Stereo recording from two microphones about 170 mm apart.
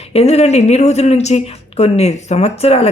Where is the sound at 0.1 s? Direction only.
40° left (ahead or behind).